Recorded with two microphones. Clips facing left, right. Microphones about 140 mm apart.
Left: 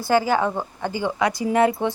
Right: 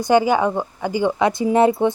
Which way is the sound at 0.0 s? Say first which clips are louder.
Right 4 dB; 20° right (ahead or behind).